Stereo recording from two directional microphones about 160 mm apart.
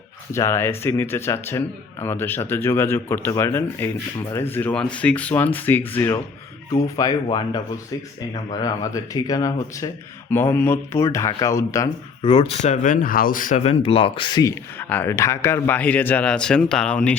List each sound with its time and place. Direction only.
0.3 s speech: 15° left (ahead or behind)
12.2 s speech: 35° left (ahead or behind); by 13.6 s 60° left (ahead or behind)
13.7 s speech: 35° left (ahead or behind)
14.8 s speech: 10° left (ahead or behind)